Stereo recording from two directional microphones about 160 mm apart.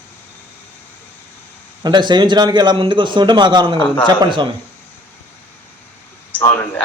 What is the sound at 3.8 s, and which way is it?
Speech, 5° left (ahead or behind).